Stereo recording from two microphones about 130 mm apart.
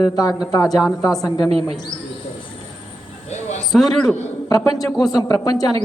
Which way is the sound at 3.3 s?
60° left (ahead or behind).